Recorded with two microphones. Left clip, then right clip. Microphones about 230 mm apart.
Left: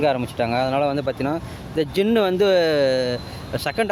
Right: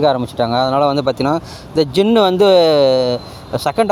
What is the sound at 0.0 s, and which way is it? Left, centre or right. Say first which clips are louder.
Speech: right 6 dB; right.